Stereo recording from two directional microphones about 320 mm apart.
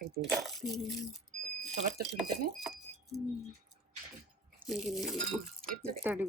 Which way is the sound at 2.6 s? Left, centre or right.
Centre.